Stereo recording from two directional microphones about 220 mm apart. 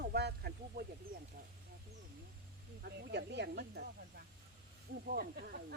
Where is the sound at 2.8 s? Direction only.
50° right (ahead or behind).